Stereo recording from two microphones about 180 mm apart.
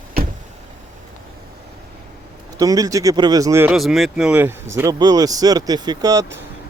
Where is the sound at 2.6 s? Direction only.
20° right (ahead or behind).